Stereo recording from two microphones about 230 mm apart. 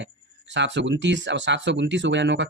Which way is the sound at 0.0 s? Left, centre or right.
Right.